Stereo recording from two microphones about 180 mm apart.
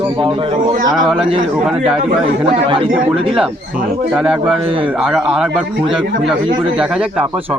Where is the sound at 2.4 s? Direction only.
25° right (ahead or behind).